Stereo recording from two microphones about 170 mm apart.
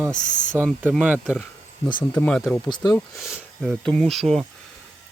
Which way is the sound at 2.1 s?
10° left (ahead or behind).